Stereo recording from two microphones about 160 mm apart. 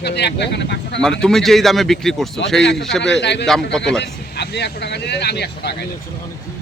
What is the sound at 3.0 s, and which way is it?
Speech, 90° left.